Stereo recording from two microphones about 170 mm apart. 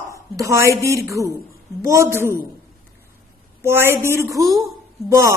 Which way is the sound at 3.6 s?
15° right (ahead or behind).